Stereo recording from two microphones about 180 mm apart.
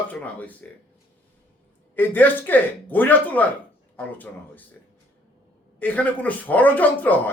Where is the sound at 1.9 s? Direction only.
10° left (ahead or behind).